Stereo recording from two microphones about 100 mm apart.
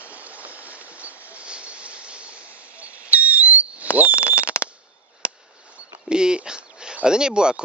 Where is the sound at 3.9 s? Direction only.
15° right (ahead or behind).